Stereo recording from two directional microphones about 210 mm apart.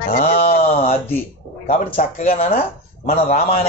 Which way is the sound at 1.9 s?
40° left (ahead or behind).